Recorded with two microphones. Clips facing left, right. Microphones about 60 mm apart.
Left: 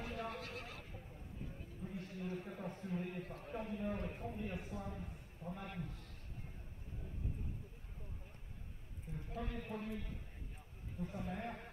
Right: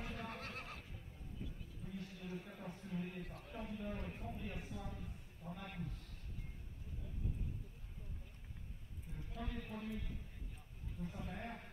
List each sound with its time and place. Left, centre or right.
0.0 s neigh: left
0.3 s neigh: right
1.8 s a man's voice: left
9.3 s speech: left